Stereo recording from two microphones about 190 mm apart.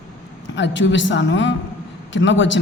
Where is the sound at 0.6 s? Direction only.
75° left (ahead or behind).